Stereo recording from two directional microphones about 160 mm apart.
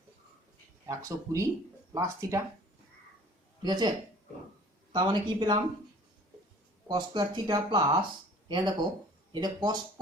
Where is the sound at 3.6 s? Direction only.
25° right (ahead or behind).